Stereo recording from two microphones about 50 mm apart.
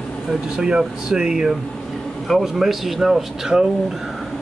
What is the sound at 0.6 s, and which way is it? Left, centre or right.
A man's voice, centre.